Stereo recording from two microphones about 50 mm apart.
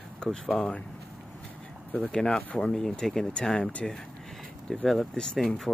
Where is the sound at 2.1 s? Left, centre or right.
Centre.